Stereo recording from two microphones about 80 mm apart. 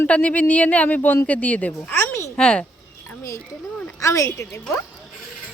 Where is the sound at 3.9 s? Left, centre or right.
Left.